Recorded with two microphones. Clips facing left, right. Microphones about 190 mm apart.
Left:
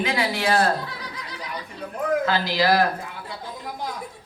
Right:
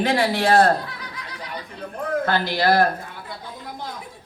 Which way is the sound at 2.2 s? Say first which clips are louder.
Right 1 dB; 55° right (ahead or behind).